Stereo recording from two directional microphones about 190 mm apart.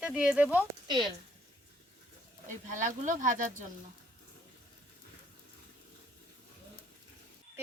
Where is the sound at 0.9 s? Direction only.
25° right (ahead or behind).